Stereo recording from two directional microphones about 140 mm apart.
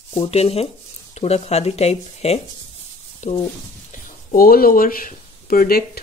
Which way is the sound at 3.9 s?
75° left (ahead or behind).